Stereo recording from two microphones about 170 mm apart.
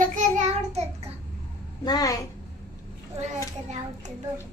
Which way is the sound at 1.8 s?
20° left (ahead or behind).